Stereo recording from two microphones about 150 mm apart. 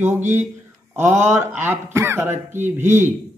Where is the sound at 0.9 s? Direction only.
15° right (ahead or behind).